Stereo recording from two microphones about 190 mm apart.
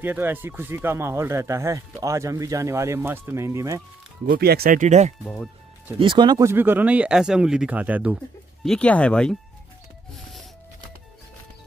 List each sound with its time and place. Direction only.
0.0 s speech: 10° right (ahead or behind)
4.3 s speech: 55° right (ahead or behind); by 5.1 s 40° right (ahead or behind)
5.2 s speech: 5° left (ahead or behind)
5.9 s speech: 25° right (ahead or behind)
6.5 s speech: 10° right (ahead or behind)
8.6 s speech: 5° left (ahead or behind)